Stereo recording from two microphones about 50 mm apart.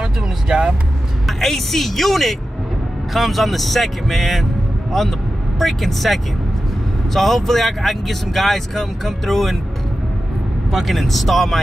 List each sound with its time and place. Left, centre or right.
0.0 s vehicle: centre
1.2 s speech: centre
10.7 s speech: centre